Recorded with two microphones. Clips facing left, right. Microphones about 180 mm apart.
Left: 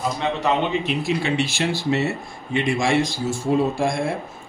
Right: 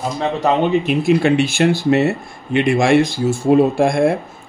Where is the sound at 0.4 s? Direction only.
50° right (ahead or behind).